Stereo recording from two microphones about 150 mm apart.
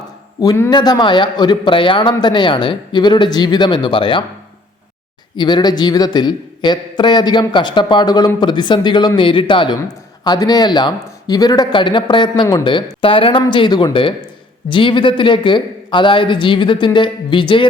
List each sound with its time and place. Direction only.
0.4 s a man's voice: 15° left (ahead or behind)
0.7 s a man's voice: 30° left (ahead or behind)
5.4 s a man's voice: 30° left (ahead or behind)